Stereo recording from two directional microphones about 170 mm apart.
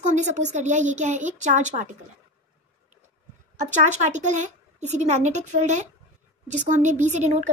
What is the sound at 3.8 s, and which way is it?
Speech, 45° right (ahead or behind).